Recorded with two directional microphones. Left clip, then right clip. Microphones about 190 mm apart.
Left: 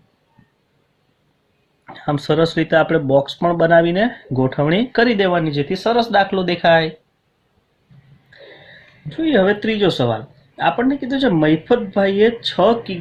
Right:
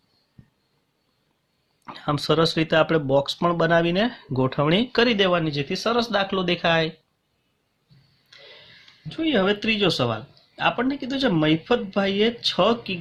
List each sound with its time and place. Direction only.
1.9 s speech: 40° right (ahead or behind)
9.0 s speech: 30° right (ahead or behind)